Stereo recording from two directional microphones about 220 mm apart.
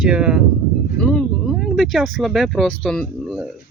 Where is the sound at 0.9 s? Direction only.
5° left (ahead or behind).